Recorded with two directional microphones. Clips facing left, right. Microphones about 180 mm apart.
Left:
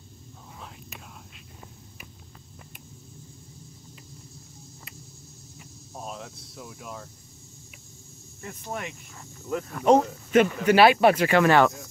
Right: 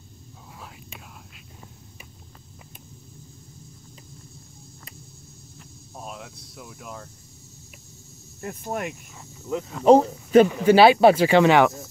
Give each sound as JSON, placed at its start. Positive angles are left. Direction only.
{"t": 0.6, "sound": "whispering", "side_deg": 0}
{"t": 5.6, "sound": "a sound", "side_deg": 0}
{"t": 8.4, "sound": "speech", "side_deg": -50}
{"t": 8.8, "sound": "speech", "side_deg": 0}
{"t": 9.8, "sound": "speech", "side_deg": -35}